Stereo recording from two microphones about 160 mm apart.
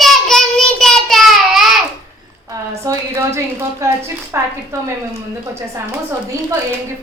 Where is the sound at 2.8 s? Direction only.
15° right (ahead or behind).